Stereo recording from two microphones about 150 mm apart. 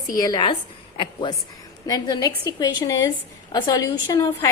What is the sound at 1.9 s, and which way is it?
A woman's voice, 25° left (ahead or behind).